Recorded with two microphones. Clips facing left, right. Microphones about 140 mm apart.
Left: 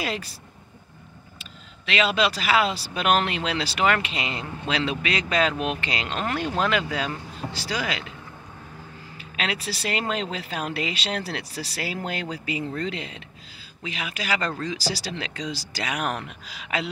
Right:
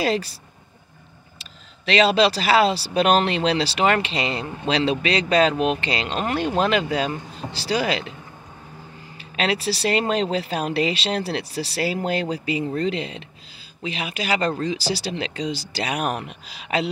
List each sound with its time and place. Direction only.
0.0 s speech: 35° right (ahead or behind)
1.4 s speech: 35° right (ahead or behind)
9.2 s speech: 30° right (ahead or behind)
16.1 s speech: 15° right (ahead or behind)
16.4 s speech: 30° right (ahead or behind)